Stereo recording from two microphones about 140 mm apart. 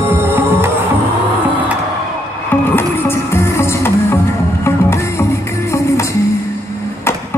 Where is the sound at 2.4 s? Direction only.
15° left (ahead or behind).